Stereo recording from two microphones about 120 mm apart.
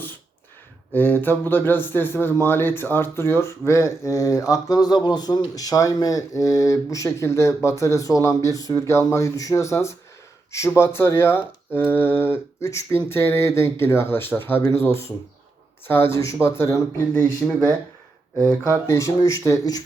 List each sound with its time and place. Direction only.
0.9 s speech: 15° left (ahead or behind)
17.4 s speech: centre (ahead or behind)
18.9 s speech: 25° left (ahead or behind)